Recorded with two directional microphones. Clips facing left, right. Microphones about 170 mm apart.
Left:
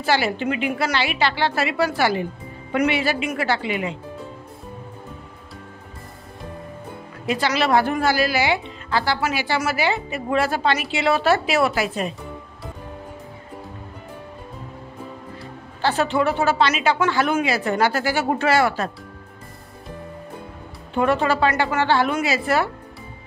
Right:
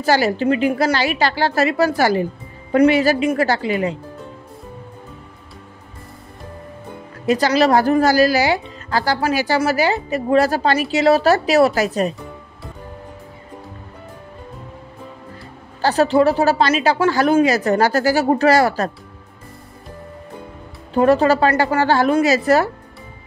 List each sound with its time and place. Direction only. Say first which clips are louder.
0.0 s a woman's voice: right 5 dB; 40° right (ahead or behind)
7.2 s a woman's voice: right 6 dB; 40° right (ahead or behind)
15.8 s a woman's voice: right 6 dB; 40° right (ahead or behind)
20.9 s a woman's voice: right 6 dB; 35° right (ahead or behind)